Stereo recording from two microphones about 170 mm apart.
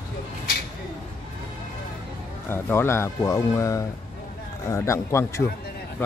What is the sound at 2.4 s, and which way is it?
Speech, 15° left (ahead or behind).